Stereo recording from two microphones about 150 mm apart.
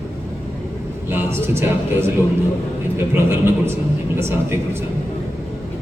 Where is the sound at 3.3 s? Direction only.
15° right (ahead or behind).